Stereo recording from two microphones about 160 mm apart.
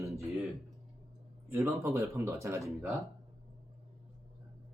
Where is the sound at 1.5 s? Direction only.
15° right (ahead or behind).